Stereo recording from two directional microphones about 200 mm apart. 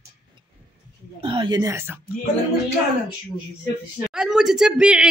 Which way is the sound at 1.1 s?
25° right (ahead or behind).